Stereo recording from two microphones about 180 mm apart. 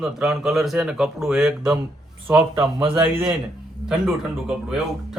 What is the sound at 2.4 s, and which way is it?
Speech, 30° right (ahead or behind).